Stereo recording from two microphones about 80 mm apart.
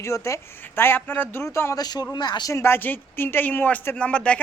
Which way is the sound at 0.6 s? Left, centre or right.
Left.